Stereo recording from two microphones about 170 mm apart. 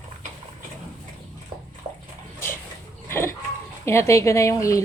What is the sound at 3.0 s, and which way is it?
Livestock, 15° left (ahead or behind).